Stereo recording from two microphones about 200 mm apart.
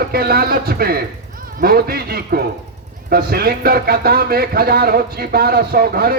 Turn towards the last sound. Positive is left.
turn(degrees=-50)  # may be behind; listen again after turning